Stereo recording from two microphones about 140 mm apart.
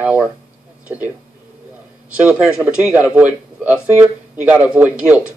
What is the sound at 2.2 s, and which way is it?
A man's voice, 10° right (ahead or behind).